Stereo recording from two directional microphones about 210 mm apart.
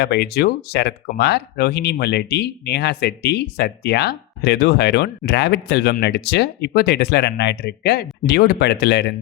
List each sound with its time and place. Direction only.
0.0 s speech: 50° left (ahead or behind)